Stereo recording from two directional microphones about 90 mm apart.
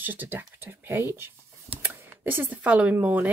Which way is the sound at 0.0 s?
20° right (ahead or behind).